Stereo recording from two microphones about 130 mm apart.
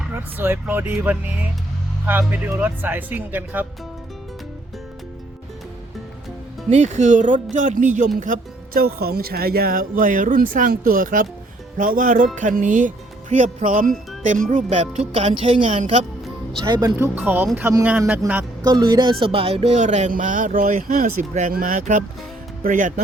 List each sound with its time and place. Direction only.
0.1 s speech: 15° right (ahead or behind)
6.7 s speech: 65° right (ahead or behind)
8.2 s speech: 90° right
11.8 s music: 90° right
14.4 s speech: 70° right (ahead or behind)
16.6 s speech: 35° right (ahead or behind)
17.0 s speech: 15° right (ahead or behind)
18.2 s speech: 25° right (ahead or behind); by 23.0 s 85° right